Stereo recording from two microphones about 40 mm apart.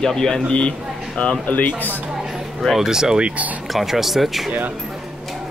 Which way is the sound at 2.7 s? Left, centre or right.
Centre.